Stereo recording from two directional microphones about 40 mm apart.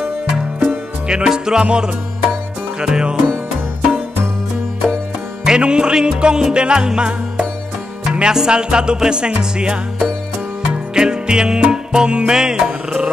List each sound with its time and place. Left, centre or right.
0.6 s music: right
5.6 s music: right